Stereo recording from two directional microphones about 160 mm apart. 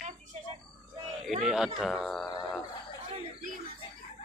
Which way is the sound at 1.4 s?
5° right (ahead or behind).